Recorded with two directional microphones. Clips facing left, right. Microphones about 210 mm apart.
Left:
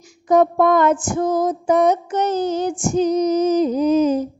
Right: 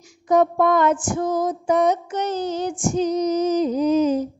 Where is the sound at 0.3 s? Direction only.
50° left (ahead or behind).